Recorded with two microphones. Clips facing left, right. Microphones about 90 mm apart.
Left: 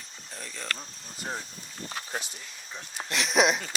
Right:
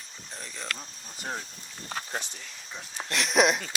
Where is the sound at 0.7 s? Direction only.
Centre (ahead or behind).